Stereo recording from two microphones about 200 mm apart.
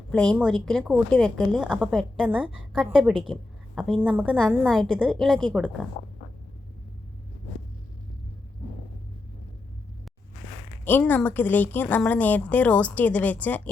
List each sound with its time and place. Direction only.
0.1 s a woman's voice: 5° left (ahead or behind)
6.0 s a sound: 50° left (ahead or behind)
10.8 s a woman's voice: 10° left (ahead or behind)